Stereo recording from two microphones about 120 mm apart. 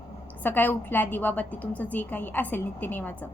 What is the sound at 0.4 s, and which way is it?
A woman's voice, 15° left (ahead or behind).